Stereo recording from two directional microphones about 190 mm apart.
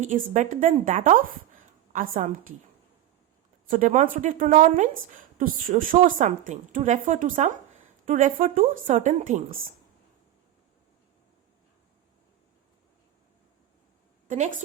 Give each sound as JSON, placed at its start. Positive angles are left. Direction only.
{"t": 0.0, "sound": "a woman's voice", "side_deg": -40}
{"t": 3.7, "sound": "a woman's voice", "side_deg": -45}
{"t": 14.3, "sound": "a woman's voice", "side_deg": -40}